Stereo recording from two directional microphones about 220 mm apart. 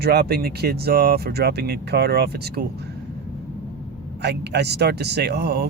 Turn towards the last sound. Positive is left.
turn(degrees=-45)  # may be behind; listen again after turning